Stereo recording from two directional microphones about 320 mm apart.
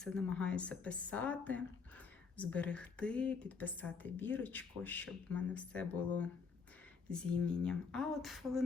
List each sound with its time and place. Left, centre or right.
0.0 s speech: centre